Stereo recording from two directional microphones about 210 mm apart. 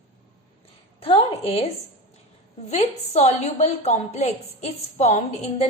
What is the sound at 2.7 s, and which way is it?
A woman's voice, 30° left (ahead or behind).